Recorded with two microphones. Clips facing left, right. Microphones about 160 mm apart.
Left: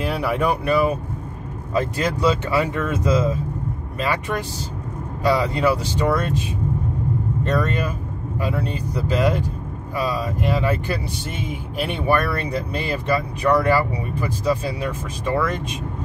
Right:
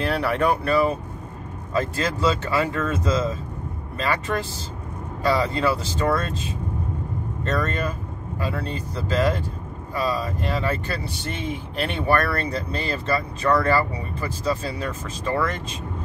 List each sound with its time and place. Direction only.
0.0 s speech: 10° left (ahead or behind)
7.4 s speech: 10° left (ahead or behind)